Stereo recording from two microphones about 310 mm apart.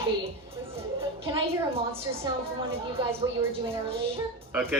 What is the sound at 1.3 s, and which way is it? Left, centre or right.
A woman's voice, centre.